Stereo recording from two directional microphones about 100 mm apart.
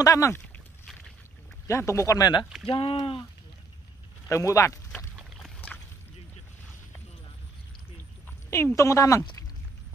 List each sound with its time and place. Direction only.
0.0 s speech: 35° left (ahead or behind)
1.7 s speech: 30° left (ahead or behind)
2.7 s speech: 60° left (ahead or behind)
4.3 s speech: 30° left (ahead or behind)
8.5 s speech: 25° left (ahead or behind)